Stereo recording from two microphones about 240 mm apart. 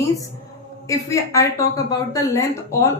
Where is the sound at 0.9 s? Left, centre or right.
Centre.